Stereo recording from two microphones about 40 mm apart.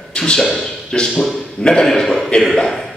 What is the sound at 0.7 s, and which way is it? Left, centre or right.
Speech, centre.